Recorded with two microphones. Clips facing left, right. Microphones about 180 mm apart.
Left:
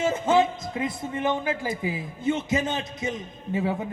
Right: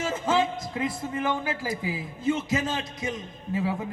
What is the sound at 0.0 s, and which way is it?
A man's voice, 25° left (ahead or behind).